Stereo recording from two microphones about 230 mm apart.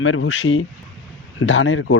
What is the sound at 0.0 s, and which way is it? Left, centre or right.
Speech, left.